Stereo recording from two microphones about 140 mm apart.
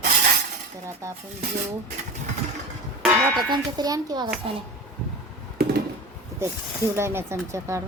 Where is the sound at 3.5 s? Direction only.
30° right (ahead or behind).